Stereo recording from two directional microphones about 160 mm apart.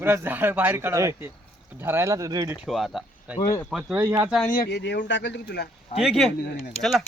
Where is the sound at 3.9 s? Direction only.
15° right (ahead or behind).